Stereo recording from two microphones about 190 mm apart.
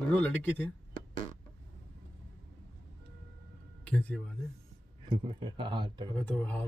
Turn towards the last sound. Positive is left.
turn(degrees=10)  # may be behind; listen again after turning